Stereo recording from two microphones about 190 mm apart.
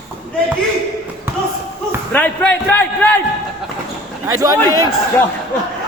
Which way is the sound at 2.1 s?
10° left (ahead or behind).